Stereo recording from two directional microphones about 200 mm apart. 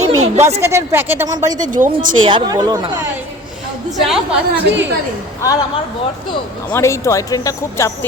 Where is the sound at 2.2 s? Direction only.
25° right (ahead or behind).